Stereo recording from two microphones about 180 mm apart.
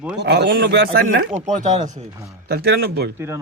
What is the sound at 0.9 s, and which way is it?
Speech, 60° right (ahead or behind).